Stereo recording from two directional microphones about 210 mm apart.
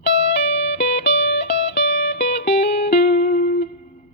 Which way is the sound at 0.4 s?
55° left (ahead or behind).